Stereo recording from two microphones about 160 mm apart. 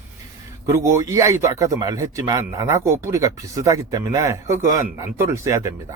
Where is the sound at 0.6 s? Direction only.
20° right (ahead or behind).